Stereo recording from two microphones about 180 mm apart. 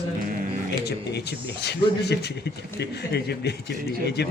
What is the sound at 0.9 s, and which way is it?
A man's voice, 65° left (ahead or behind).